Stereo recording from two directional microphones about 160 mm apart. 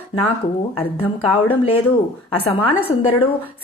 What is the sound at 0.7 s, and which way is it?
A woman's voice, 35° left (ahead or behind).